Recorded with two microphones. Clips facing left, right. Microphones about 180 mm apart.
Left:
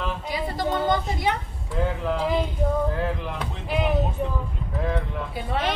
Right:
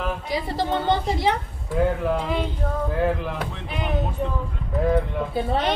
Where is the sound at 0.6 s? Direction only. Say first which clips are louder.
Right 1 dB; 25° right (ahead or behind).